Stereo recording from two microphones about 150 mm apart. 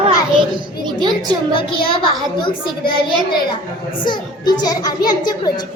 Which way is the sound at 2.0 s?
35° left (ahead or behind).